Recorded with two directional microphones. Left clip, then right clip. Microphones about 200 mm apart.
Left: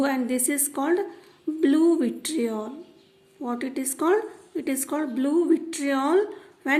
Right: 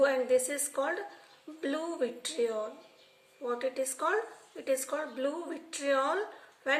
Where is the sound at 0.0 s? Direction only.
50° left (ahead or behind).